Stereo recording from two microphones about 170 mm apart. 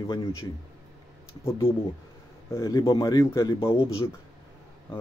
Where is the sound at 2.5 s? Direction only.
20° left (ahead or behind).